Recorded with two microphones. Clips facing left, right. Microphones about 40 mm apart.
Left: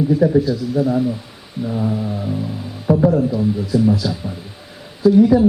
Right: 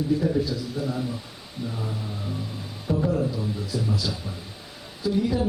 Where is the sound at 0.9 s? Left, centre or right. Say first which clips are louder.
Left 11 dB; centre.